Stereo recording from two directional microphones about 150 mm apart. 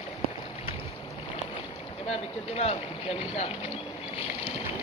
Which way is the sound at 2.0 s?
45° left (ahead or behind).